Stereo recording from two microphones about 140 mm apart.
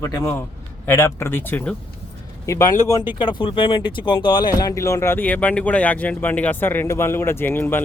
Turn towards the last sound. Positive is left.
turn(degrees=15)  # may be behind; listen again after turning